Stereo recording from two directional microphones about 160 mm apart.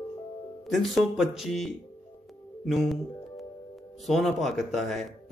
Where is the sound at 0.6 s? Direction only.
Centre (ahead or behind).